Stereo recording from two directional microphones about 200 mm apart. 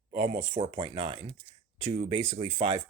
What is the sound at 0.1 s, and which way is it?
Speech, 35° right (ahead or behind).